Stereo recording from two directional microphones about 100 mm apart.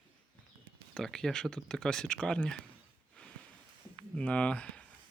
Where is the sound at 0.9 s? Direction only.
5° left (ahead or behind).